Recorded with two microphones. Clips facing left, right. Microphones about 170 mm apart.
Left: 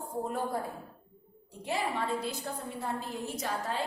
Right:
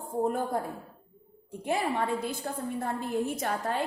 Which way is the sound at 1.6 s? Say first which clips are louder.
Right 4 dB; 50° right (ahead or behind).